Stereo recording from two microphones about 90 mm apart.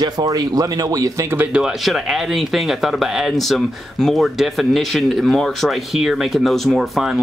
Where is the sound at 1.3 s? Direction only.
20° right (ahead or behind).